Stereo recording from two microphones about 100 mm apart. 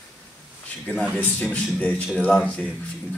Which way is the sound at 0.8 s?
15° left (ahead or behind).